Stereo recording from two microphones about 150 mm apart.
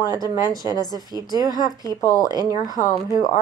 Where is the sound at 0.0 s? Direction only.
25° left (ahead or behind).